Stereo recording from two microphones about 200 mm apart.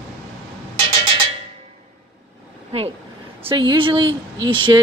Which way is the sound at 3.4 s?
25° right (ahead or behind).